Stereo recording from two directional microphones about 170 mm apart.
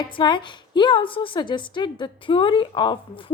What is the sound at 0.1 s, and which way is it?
A woman's voice, 30° left (ahead or behind).